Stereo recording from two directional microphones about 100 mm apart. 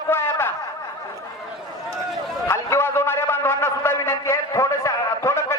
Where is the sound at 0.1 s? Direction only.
25° left (ahead or behind).